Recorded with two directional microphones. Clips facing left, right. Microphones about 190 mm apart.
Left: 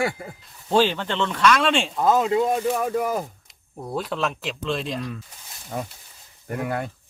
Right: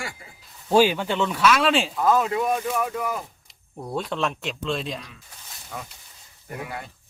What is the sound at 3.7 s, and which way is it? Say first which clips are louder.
Speech: even; centre (ahead or behind).